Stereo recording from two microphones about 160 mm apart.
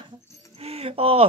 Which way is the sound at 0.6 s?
40° right (ahead or behind).